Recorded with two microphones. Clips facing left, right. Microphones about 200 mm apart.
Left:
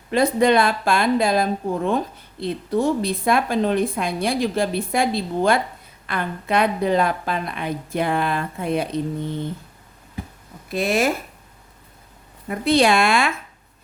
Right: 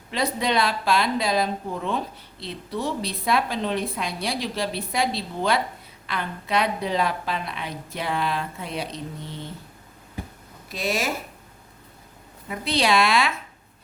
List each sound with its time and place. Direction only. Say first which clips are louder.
0.1 s a woman's voice: left 8 dB; 50° left (ahead or behind)
10.7 s speech: left 7 dB; 55° left (ahead or behind)
12.5 s a woman's voice: left 6 dB; 50° left (ahead or behind)